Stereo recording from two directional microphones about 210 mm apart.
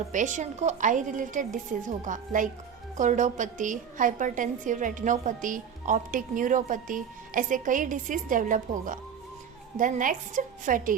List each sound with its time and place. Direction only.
0.1 s a woman's voice: 35° right (ahead or behind)